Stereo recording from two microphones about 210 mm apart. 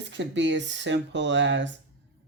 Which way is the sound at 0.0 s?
60° right (ahead or behind).